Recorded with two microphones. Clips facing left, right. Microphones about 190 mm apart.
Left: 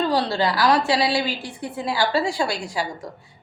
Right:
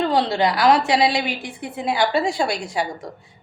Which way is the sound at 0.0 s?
20° right (ahead or behind).